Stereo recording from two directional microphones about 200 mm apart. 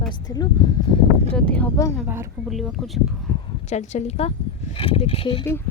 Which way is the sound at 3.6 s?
35° left (ahead or behind).